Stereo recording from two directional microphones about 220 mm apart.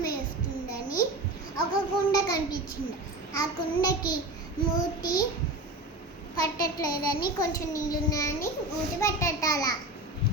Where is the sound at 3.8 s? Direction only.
20° left (ahead or behind).